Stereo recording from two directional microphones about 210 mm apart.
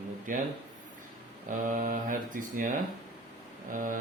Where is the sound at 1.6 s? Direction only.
40° right (ahead or behind).